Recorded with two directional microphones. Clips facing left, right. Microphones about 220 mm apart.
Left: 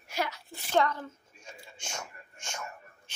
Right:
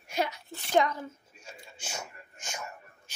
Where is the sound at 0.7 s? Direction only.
10° right (ahead or behind).